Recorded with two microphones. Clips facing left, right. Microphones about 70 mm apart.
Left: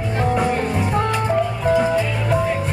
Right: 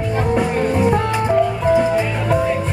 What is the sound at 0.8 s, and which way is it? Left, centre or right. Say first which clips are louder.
Music: right 3 dB; centre.